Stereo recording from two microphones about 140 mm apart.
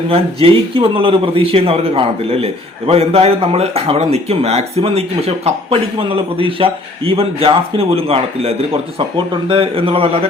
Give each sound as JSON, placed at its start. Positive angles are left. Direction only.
{"t": 0.1, "sound": "a man's voice", "side_deg": -40}